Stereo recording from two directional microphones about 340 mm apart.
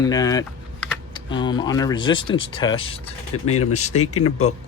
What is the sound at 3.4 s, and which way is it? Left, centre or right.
Speech, left.